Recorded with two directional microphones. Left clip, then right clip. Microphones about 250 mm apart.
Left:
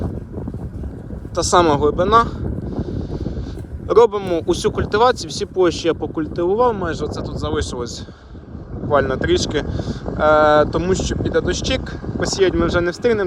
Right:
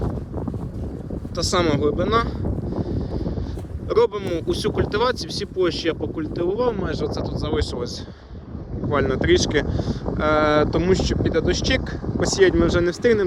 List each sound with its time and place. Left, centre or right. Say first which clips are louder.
1.4 s speech: left 6 dB; centre
2.7 s wind noise: left 1 dB; centre
3.8 s speech: left 6 dB; centre
8.9 s speech: left 3 dB; centre